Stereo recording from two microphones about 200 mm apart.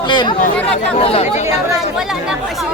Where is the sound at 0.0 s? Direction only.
20° left (ahead or behind).